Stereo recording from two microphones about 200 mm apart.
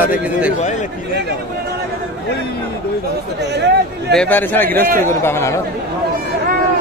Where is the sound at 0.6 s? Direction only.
35° left (ahead or behind).